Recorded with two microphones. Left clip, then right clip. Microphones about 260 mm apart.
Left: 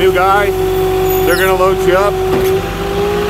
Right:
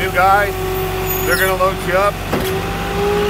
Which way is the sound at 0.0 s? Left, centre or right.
Left.